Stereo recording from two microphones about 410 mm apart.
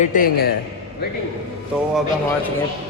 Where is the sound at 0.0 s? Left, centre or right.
Centre.